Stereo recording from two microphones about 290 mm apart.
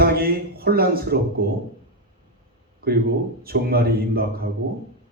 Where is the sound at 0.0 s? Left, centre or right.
Right.